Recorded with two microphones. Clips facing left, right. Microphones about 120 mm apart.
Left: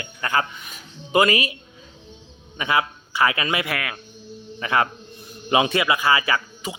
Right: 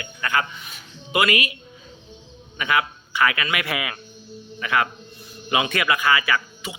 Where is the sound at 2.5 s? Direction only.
30° left (ahead or behind).